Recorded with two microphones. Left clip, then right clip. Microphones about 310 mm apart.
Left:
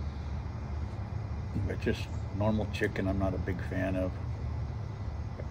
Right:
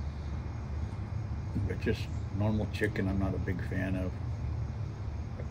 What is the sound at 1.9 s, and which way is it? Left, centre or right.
Speech, centre.